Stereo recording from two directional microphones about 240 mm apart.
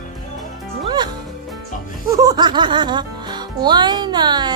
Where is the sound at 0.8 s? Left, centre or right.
Centre.